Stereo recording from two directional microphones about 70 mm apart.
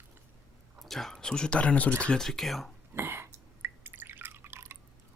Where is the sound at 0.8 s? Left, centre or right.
Centre.